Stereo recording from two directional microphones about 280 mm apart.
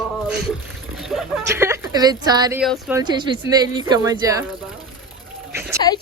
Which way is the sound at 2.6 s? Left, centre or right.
Centre.